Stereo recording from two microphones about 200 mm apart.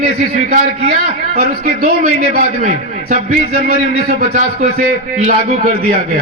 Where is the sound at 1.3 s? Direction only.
45° right (ahead or behind).